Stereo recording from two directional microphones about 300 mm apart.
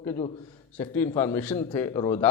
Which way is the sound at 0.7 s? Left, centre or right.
Centre.